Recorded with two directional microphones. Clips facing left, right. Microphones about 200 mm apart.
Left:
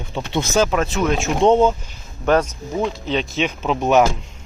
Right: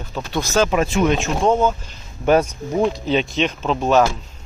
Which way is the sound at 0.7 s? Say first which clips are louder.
Right 2 dB; 5° right (ahead or behind).